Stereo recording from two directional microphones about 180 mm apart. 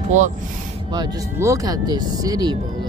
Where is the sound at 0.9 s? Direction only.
20° right (ahead or behind).